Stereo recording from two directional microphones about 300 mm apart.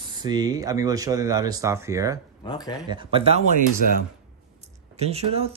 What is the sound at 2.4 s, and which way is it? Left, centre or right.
Speech, centre.